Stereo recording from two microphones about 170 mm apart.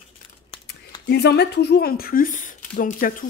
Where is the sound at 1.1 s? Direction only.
75° left (ahead or behind).